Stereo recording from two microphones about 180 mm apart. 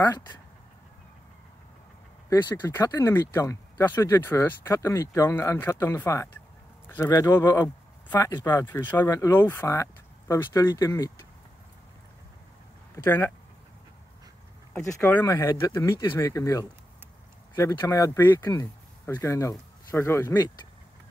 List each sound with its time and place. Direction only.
2.2 s speech: 15° left (ahead or behind)
12.9 s speech: 15° left (ahead or behind)
14.7 s speech: 15° left (ahead or behind)